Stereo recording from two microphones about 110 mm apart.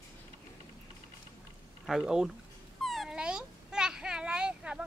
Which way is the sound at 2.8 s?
Centre (ahead or behind).